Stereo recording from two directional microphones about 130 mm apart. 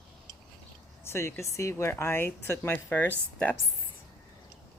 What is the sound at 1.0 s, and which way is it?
Speech, 20° left (ahead or behind).